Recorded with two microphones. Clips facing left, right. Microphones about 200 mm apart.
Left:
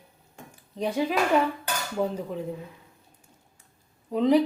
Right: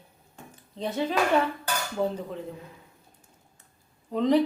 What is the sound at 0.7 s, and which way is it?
Speech, 10° left (ahead or behind).